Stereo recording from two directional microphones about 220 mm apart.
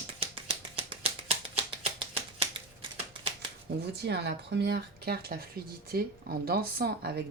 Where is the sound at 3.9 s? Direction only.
50° right (ahead or behind).